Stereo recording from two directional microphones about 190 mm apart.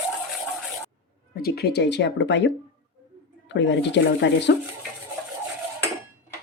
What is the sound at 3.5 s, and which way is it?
Speech, 70° left (ahead or behind).